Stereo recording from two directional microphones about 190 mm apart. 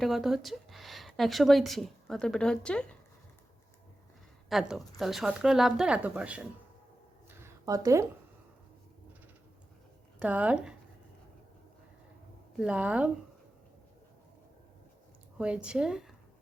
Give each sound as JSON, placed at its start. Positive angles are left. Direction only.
{"t": 0.0, "sound": "a woman's voice", "side_deg": 0}
{"t": 4.7, "sound": "a woman's voice", "side_deg": 0}
{"t": 7.3, "sound": "a sound", "side_deg": -15}
{"t": 10.2, "sound": "a woman's voice", "side_deg": -5}
{"t": 12.5, "sound": "speech", "side_deg": -5}
{"t": 15.4, "sound": "a woman's voice", "side_deg": -5}